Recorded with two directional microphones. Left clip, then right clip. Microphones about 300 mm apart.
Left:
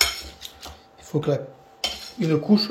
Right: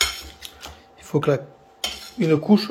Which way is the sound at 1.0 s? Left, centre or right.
Centre.